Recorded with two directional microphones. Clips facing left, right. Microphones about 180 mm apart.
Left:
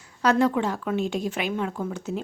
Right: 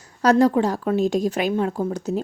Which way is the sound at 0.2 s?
40° right (ahead or behind).